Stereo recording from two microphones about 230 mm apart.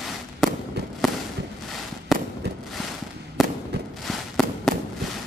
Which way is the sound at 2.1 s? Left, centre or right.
Centre.